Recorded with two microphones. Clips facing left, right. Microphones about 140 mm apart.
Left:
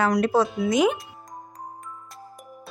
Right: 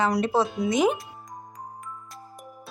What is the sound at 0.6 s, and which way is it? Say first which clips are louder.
Speech: left 1 dB; 30° right (ahead or behind).